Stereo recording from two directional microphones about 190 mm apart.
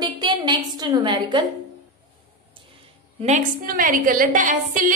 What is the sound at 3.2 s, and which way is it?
A woman's voice, 50° right (ahead or behind).